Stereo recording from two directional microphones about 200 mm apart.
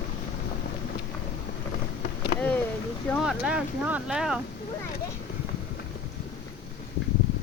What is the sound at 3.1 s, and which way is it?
Speech, centre (ahead or behind).